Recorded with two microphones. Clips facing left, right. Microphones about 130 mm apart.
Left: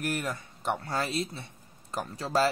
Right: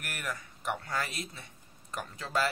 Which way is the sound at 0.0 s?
30° left (ahead or behind).